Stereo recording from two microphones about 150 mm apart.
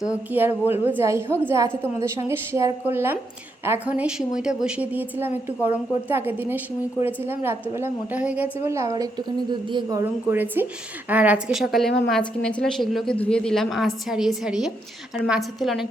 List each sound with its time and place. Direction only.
0.0 s a woman's voice: 10° right (ahead or behind); by 10.0 s 30° right (ahead or behind)
10.0 s a woman's voice: 15° right (ahead or behind)